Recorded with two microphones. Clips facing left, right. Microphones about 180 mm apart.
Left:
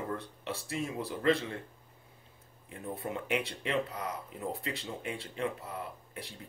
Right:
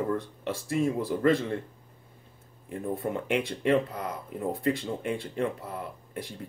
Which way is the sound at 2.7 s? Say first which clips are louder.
Right 7 dB; 50° right (ahead or behind).